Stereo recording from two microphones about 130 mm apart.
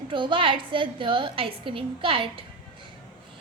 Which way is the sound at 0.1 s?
40° right (ahead or behind).